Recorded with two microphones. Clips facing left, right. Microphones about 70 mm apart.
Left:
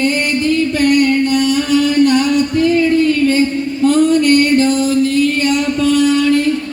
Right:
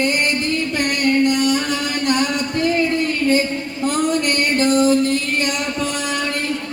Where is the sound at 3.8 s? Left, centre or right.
Right.